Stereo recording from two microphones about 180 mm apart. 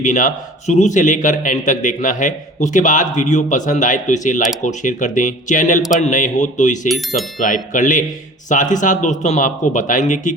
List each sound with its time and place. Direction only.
0.0 s a man's voice: 45° left (ahead or behind)